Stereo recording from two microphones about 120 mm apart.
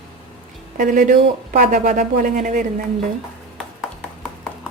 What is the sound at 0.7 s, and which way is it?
Speech, 90° right.